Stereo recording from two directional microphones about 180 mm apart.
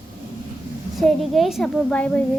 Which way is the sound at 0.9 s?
Centre (ahead or behind).